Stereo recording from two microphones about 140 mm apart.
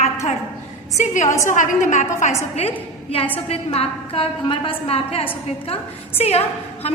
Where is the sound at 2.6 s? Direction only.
45° left (ahead or behind).